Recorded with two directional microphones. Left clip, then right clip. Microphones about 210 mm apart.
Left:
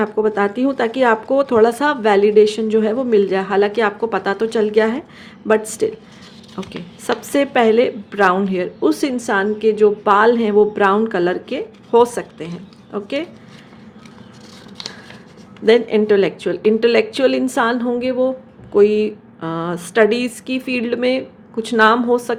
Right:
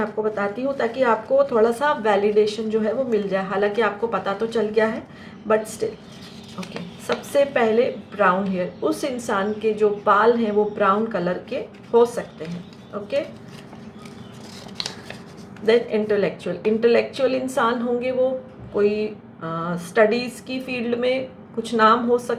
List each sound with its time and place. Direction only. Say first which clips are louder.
0.0 s a woman's voice: left 6 dB; 50° left (ahead or behind)
6.6 s a woman's voice: left 4 dB; 50° left (ahead or behind)
15.6 s a woman's voice: left 5 dB; 50° left (ahead or behind)